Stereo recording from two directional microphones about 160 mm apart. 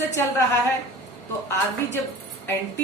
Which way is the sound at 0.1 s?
20° left (ahead or behind).